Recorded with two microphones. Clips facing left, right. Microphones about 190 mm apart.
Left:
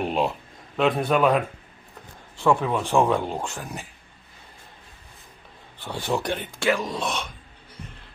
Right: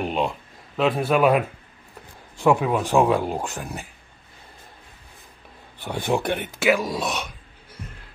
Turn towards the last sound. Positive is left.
turn(degrees=-10)  # may be behind; listen again after turning